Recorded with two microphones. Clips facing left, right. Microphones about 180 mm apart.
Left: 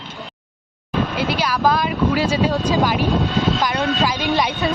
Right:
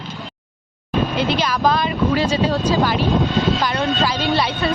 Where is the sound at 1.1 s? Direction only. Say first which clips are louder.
Right 1 dB; 5° left (ahead or behind).